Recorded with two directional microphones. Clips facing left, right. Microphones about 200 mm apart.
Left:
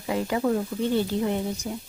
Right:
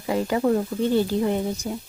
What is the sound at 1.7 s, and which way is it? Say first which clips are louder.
Speech: right 3 dB; 35° right (ahead or behind).